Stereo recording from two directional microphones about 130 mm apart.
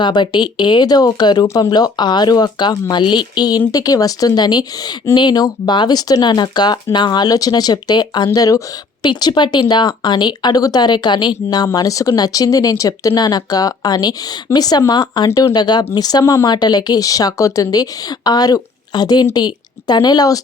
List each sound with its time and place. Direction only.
0.0 s speech: 35° left (ahead or behind)
15.3 s speech: 20° left (ahead or behind)
15.5 s speech: 35° left (ahead or behind)